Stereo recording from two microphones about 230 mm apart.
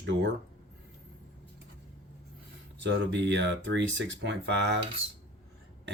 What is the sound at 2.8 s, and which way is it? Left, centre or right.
Speech, right.